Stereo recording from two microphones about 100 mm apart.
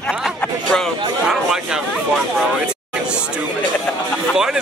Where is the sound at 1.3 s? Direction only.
5° right (ahead or behind).